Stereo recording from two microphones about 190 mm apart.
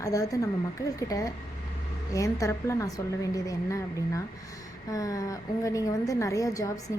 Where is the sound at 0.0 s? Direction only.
20° left (ahead or behind).